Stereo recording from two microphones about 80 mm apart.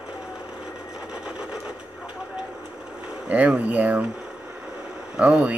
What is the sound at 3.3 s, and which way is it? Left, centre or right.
Speech, centre.